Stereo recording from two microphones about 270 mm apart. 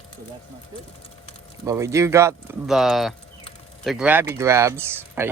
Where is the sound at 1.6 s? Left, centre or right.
Centre.